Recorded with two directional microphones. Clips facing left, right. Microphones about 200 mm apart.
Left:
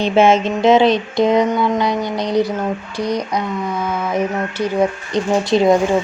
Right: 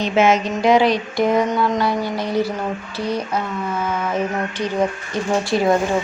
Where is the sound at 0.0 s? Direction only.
30° left (ahead or behind).